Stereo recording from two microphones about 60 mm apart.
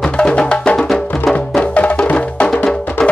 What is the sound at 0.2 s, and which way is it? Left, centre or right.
Music, centre.